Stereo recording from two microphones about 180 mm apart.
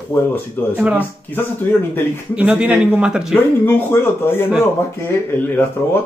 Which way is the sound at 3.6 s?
10° left (ahead or behind).